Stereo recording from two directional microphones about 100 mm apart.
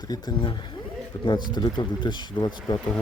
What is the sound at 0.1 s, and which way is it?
Speech, 40° left (ahead or behind).